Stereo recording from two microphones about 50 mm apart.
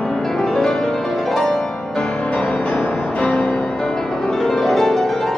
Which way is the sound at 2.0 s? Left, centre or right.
Left.